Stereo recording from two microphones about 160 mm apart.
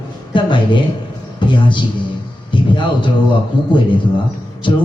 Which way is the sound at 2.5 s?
30° left (ahead or behind).